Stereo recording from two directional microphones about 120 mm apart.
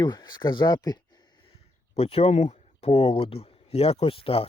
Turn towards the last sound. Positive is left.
turn(degrees=50)  # may be behind; listen again after turning